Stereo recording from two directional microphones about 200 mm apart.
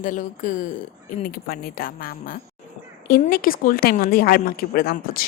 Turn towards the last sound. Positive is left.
turn(degrees=50)  # may be behind; listen again after turning